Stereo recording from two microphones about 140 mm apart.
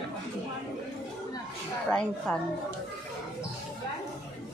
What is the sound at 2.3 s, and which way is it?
Speech, 5° left (ahead or behind).